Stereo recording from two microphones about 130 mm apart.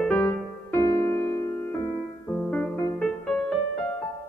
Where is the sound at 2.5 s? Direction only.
5° left (ahead or behind).